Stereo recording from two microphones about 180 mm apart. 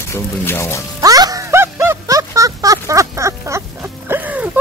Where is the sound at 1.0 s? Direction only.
20° right (ahead or behind).